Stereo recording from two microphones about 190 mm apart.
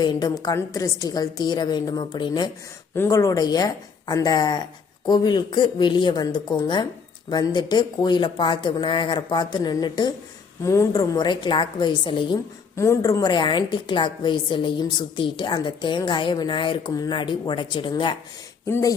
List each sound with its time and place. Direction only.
0.0 s a woman's voice: 20° left (ahead or behind)
12.7 s a woman's voice: 15° left (ahead or behind)